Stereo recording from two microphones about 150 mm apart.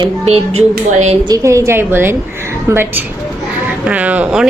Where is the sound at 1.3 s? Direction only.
20° right (ahead or behind).